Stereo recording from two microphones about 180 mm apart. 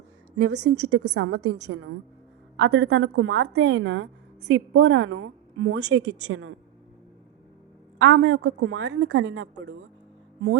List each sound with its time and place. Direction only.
0.4 s a woman's voice: 70° right (ahead or behind)
2.6 s a woman's voice: 80° right
7.9 s a woman's voice: 85° right